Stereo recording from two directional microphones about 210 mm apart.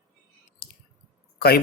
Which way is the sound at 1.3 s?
45° left (ahead or behind).